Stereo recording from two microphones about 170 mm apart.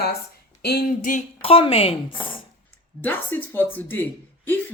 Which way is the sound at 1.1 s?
50° left (ahead or behind).